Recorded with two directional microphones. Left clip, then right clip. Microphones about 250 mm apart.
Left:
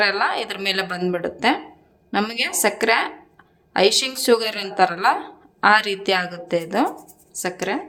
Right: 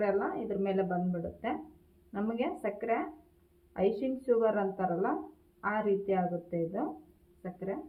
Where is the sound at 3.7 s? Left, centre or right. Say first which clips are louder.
Left 13 dB; left.